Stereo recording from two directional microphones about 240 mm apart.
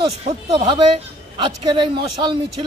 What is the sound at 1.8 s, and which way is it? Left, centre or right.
Speech, centre.